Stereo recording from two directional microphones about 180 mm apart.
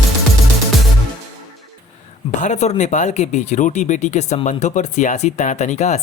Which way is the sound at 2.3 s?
40° left (ahead or behind).